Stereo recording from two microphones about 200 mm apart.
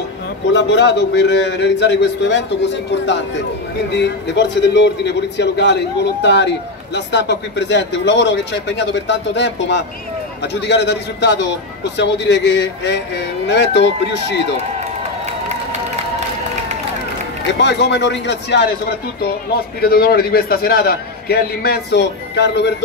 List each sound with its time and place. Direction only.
0.5 s a man's voice: 60° left (ahead or behind)
17.6 s a man's voice: 60° left (ahead or behind)